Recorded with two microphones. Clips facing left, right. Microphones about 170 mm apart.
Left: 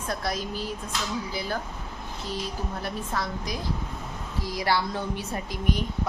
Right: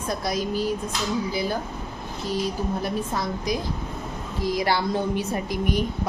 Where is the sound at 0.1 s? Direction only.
15° right (ahead or behind).